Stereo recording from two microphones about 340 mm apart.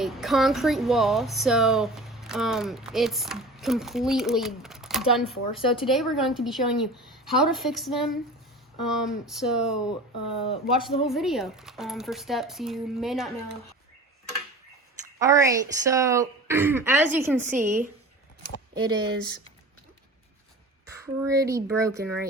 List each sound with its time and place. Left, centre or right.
0.0 s speech: centre
10.3 s speech: centre
10.8 s speech: centre
15.2 s a woman's voice: centre
18.7 s a woman's voice: centre
20.8 s speech: centre